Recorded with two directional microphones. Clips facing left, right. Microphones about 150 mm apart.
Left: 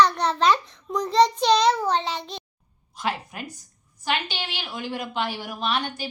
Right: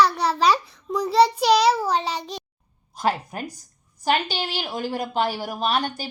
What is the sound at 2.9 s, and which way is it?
A woman's voice, 40° right (ahead or behind).